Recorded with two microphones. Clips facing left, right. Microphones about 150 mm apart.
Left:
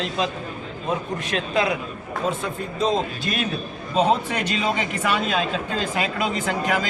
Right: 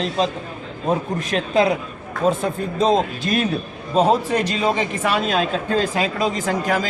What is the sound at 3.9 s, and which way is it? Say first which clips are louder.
A man's voice: right 4 dB; 40° right (ahead or behind).